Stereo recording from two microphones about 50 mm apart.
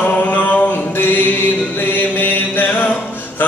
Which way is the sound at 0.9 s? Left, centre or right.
Left.